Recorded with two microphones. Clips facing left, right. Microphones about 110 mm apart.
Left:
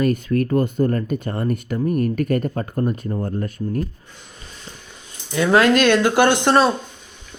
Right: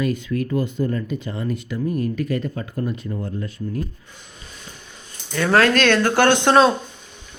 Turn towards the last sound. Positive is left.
turn(degrees=5)  # may be behind; listen again after turning